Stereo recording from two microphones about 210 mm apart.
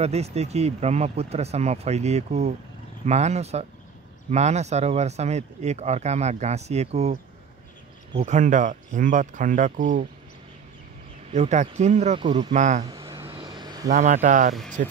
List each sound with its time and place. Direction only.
0.0 s speech: 30° right (ahead or behind)
8.2 s speech: 35° right (ahead or behind)
11.3 s speech: 35° right (ahead or behind)
12.5 s speech: 35° right (ahead or behind)
13.0 s vehicle: 20° right (ahead or behind)
13.8 s speech: 35° right (ahead or behind)